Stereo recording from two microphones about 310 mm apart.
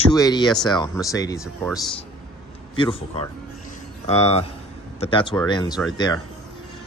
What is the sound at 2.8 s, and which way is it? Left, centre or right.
Speech, centre.